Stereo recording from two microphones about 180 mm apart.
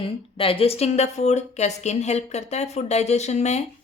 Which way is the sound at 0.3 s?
30° left (ahead or behind).